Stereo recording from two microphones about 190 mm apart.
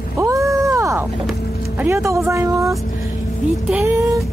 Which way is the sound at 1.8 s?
15° right (ahead or behind).